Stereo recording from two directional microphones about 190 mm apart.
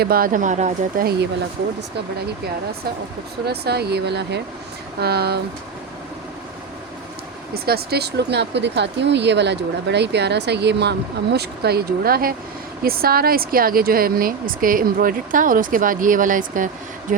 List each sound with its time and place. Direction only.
0.0 s speech: 50° right (ahead or behind)
3.4 s speech: 60° right (ahead or behind)
7.5 s speech: 55° right (ahead or behind)